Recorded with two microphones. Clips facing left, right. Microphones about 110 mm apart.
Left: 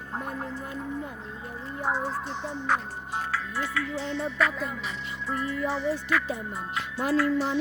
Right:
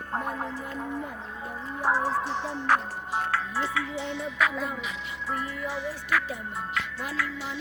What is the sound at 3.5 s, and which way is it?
Speech, 25° right (ahead or behind).